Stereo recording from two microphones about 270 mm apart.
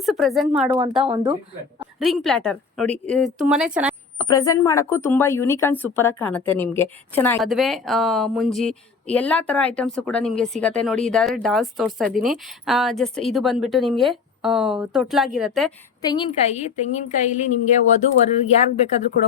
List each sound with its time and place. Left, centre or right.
0.0 s speech: centre
1.0 s speech: right
2.0 s speech: centre
4.2 s speech: centre
16.0 s a woman's voice: centre